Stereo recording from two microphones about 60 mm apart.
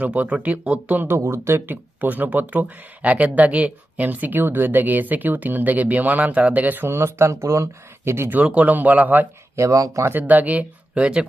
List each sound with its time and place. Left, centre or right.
0.0 s speech: right
1.2 s speech: right
1.6 s speech: right
6.8 s speech: right
8.4 s speech: right
9.6 s speech: right
10.1 s speech: right